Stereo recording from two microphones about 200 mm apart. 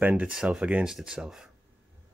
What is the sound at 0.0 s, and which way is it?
Speech, 5° right (ahead or behind).